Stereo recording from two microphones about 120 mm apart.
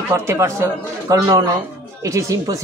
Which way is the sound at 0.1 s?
25° right (ahead or behind).